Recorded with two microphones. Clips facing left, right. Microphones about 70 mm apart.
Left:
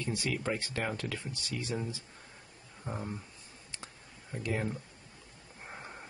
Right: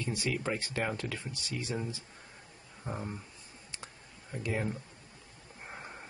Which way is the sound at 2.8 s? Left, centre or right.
Centre.